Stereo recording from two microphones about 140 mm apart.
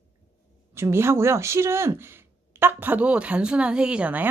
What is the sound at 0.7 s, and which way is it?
Speech, 20° right (ahead or behind).